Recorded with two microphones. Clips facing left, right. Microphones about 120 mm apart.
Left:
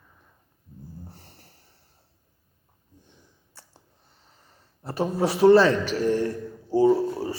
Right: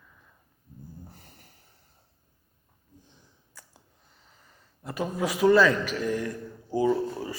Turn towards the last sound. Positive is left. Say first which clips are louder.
# left 5 dB
turn(degrees=30)  # may be behind; listen again after turning